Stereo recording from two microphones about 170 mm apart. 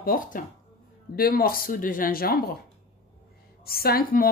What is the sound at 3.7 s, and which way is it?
Speech, 65° left (ahead or behind).